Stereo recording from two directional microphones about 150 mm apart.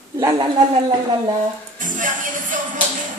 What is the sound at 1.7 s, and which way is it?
Music, 60° right (ahead or behind).